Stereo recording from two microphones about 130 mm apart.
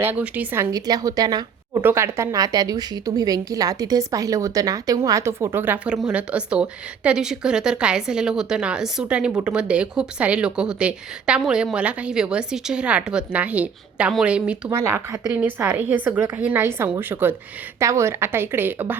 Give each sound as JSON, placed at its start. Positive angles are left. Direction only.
{"t": 0.0, "sound": "a woman's voice", "side_deg": -15}
{"t": 0.7, "sound": "speech", "side_deg": -30}
{"t": 1.8, "sound": "a woman's voice", "side_deg": -15}
{"t": 14.7, "sound": "a woman's voice", "side_deg": -20}